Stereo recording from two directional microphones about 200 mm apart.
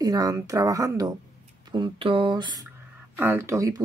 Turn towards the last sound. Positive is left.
turn(degrees=-15)  # may be behind; listen again after turning